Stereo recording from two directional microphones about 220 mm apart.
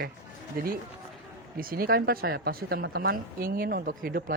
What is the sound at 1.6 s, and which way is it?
Speech, 40° right (ahead or behind).